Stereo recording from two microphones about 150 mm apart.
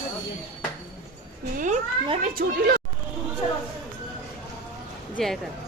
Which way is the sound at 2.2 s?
90° right.